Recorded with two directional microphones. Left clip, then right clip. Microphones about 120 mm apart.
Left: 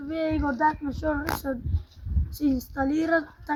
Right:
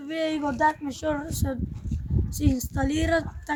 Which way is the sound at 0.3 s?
15° right (ahead or behind).